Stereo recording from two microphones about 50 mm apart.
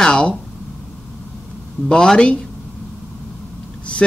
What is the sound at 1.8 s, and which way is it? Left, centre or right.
Speech, centre.